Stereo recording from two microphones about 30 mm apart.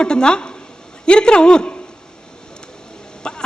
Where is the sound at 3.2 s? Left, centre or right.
Left.